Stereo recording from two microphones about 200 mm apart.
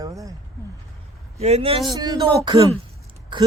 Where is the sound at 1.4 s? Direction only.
30° right (ahead or behind).